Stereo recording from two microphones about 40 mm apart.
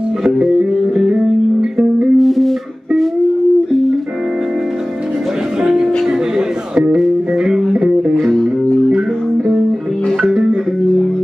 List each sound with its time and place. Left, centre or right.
0.2 s music: centre
2.1 s music: centre
5.6 s music: right
8.2 s music: centre
10.3 s music: right